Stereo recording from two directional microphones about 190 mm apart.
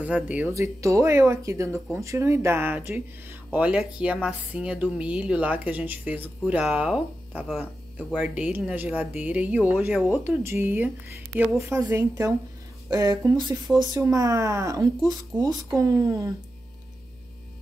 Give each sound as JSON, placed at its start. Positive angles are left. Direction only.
{"t": 0.0, "sound": "speech", "side_deg": -5}